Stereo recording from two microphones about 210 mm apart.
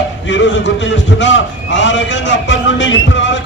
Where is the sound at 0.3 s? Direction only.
60° left (ahead or behind).